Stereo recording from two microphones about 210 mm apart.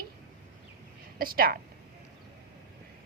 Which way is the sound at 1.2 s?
45° right (ahead or behind).